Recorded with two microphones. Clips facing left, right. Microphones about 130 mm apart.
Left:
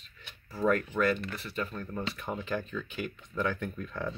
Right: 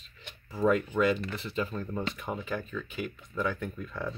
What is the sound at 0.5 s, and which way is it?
Speech, 15° right (ahead or behind).